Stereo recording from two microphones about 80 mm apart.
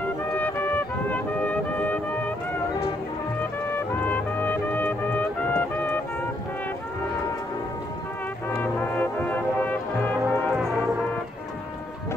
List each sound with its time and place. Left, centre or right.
0.3 s music: left
3.7 s music: left
8.5 s music: left